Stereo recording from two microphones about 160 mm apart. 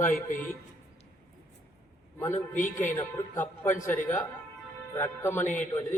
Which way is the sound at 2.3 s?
50° left (ahead or behind).